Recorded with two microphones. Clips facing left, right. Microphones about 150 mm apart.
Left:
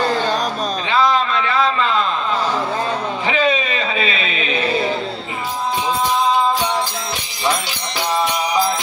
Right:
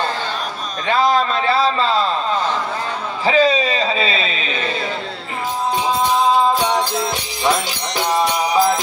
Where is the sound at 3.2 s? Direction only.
35° right (ahead or behind).